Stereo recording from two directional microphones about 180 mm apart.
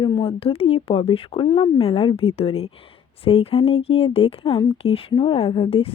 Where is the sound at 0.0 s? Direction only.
30° left (ahead or behind).